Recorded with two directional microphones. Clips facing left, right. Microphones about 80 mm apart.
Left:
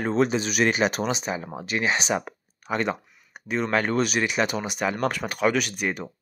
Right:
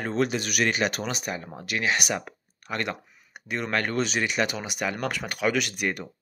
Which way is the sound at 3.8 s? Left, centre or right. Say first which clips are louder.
Left 3 dB; centre.